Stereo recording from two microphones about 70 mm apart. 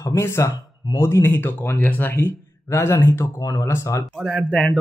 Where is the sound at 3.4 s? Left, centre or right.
Left.